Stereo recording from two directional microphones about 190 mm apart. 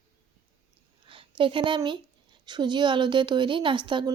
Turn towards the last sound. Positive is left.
turn(degrees=-25)  # may be behind; listen again after turning